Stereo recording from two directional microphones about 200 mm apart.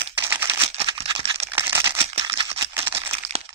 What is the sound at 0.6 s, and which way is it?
Crumpling, 25° right (ahead or behind).